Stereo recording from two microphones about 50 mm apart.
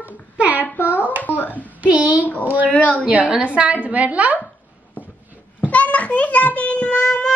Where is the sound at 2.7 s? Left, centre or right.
Left.